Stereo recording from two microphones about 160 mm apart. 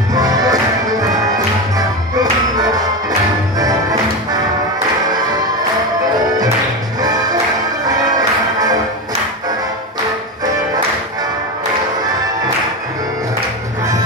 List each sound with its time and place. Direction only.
0.1 s music: 25° right (ahead or behind)
1.8 s music: 25° right (ahead or behind)
7.0 s music: 25° right (ahead or behind)